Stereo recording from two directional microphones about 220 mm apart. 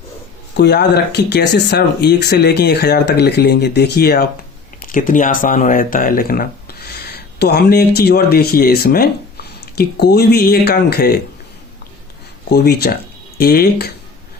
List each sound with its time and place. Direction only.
0.5 s speech: 50° left (ahead or behind)
12.5 s speech: 45° left (ahead or behind)